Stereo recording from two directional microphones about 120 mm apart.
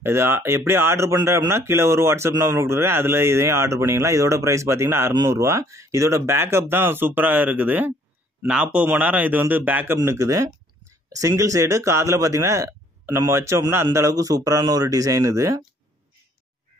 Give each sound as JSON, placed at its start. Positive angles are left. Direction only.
{"t": 0.0, "sound": "a man's voice", "side_deg": -20}
{"t": 9.9, "sound": "speech", "side_deg": -25}